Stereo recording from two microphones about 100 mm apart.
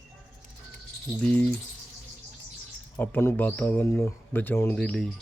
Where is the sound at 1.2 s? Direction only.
15° left (ahead or behind).